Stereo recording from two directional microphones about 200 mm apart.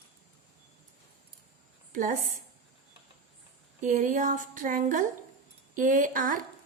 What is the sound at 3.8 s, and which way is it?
A woman's voice, 40° right (ahead or behind).